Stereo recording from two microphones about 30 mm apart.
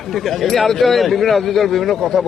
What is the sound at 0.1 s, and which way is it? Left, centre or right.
A man's voice, centre.